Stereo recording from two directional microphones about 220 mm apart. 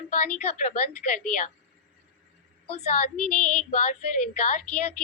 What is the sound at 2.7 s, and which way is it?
Speech, 30° left (ahead or behind).